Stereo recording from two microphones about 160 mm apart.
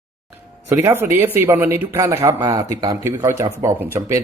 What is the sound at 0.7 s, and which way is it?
Speech, 15° right (ahead or behind).